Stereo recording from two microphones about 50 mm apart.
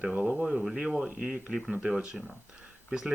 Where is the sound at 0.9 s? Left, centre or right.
Centre.